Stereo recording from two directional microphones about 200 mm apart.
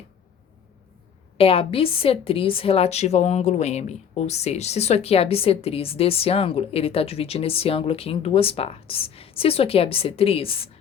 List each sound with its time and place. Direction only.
1.4 s a woman's voice: 30° left (ahead or behind)